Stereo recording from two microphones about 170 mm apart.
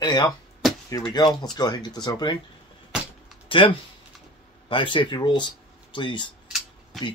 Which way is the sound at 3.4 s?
30° left (ahead or behind).